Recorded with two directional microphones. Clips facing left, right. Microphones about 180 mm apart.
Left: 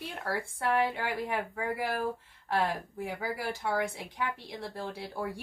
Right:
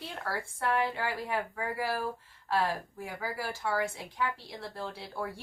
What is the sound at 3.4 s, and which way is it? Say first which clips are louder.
Speech: even; 60° left (ahead or behind).